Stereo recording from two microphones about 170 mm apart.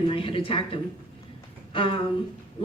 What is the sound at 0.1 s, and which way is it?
A woman's voice, 30° left (ahead or behind).